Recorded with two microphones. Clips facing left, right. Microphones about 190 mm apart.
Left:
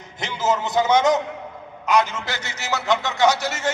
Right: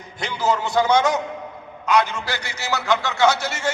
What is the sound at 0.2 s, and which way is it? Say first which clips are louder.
A man's voice: right 1 dB; 20° left (ahead or behind).